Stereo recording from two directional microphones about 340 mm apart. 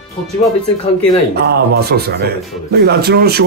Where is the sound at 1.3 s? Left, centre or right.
Right.